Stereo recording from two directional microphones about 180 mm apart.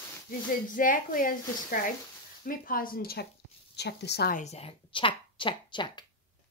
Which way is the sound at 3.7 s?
70° left (ahead or behind).